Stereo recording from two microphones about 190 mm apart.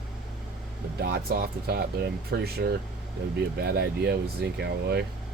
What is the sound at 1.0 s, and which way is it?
Speech, 55° right (ahead or behind).